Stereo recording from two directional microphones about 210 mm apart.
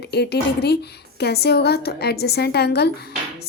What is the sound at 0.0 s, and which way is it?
A woman's voice, 50° left (ahead or behind).